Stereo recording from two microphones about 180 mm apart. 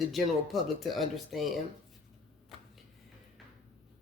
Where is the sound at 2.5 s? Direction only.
Centre (ahead or behind).